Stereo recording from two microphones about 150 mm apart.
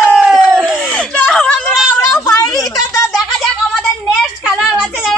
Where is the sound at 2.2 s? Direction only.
25° left (ahead or behind).